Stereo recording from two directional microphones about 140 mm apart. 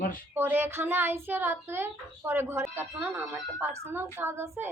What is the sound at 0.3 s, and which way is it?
A woman's voice, 15° right (ahead or behind).